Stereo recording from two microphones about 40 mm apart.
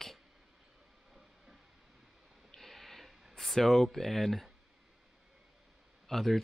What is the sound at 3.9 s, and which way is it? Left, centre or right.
Speech, centre.